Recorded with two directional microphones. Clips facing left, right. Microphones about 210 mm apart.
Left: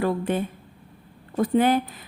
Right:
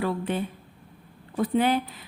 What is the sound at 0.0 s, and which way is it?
A woman's voice, 50° left (ahead or behind).